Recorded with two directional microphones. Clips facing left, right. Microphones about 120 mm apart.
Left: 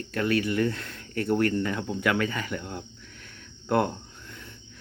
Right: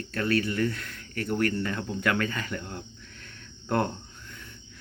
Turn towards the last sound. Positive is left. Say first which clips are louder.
# left 2 dB
turn(degrees=10)  # may be behind; listen again after turning